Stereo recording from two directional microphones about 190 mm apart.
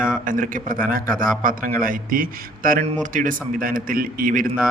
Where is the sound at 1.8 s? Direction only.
45° right (ahead or behind).